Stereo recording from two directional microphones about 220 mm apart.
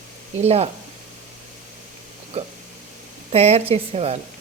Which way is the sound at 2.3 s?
30° right (ahead or behind).